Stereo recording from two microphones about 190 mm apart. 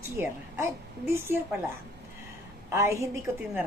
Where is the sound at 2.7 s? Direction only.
15° right (ahead or behind).